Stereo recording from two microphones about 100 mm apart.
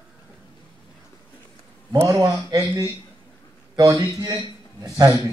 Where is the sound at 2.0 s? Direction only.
35° right (ahead or behind).